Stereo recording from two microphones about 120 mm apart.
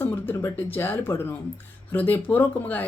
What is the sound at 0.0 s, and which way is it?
A woman's voice, 20° left (ahead or behind).